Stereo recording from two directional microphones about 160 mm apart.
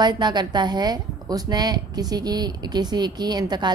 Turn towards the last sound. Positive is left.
turn(degrees=-25)  # may be behind; listen again after turning